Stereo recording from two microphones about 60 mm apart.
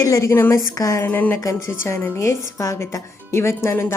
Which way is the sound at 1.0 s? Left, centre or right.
Left.